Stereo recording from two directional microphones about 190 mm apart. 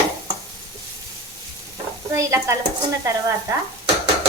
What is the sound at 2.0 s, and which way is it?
Speech, 15° right (ahead or behind).